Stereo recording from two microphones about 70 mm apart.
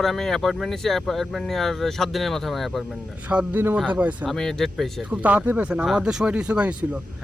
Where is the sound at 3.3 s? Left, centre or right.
Centre.